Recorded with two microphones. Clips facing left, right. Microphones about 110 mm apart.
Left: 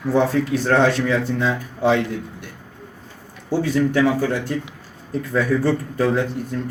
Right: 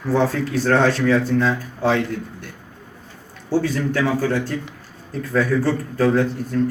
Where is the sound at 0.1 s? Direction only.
15° left (ahead or behind).